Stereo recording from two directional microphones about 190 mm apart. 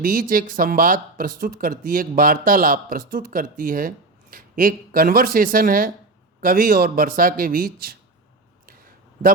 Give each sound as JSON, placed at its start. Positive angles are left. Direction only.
{"t": 0.0, "sound": "speech", "side_deg": -50}